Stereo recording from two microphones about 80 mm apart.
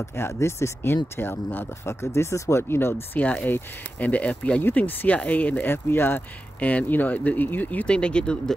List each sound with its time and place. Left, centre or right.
0.0 s speech: left
3.2 s speech: centre
7.8 s speech: centre